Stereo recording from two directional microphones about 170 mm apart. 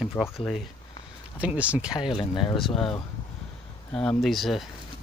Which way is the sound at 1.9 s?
30° left (ahead or behind).